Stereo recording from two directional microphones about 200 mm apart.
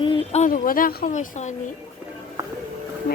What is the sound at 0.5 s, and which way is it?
Speech, 45° left (ahead or behind).